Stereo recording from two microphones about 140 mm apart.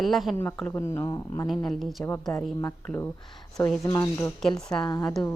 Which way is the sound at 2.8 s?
15° left (ahead or behind).